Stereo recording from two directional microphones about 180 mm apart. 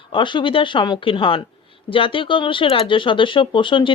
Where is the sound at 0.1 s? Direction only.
25° left (ahead or behind).